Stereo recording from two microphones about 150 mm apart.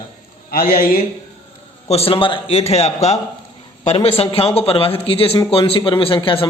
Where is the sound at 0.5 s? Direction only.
70° left (ahead or behind).